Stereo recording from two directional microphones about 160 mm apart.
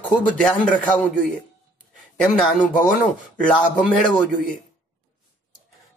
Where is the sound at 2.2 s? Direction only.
5° left (ahead or behind).